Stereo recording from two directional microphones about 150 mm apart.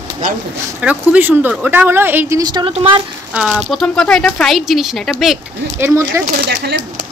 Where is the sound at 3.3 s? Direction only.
5° right (ahead or behind).